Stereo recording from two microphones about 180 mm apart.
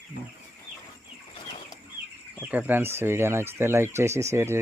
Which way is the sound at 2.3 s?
10° right (ahead or behind).